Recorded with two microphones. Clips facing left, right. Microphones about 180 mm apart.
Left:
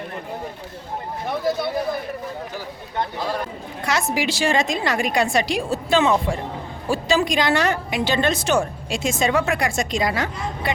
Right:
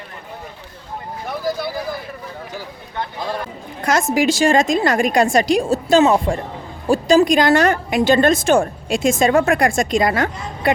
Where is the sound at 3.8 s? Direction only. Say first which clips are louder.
Right 6 dB; 45° right (ahead or behind).